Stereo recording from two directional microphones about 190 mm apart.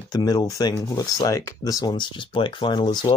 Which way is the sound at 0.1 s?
20° left (ahead or behind).